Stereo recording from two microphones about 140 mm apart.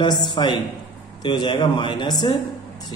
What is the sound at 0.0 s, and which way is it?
A man's voice, 30° left (ahead or behind).